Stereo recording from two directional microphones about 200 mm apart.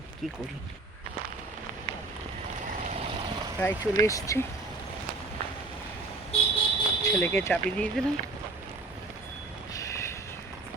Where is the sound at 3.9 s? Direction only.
15° left (ahead or behind).